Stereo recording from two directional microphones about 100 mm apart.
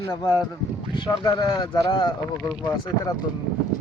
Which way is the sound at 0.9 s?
50° left (ahead or behind).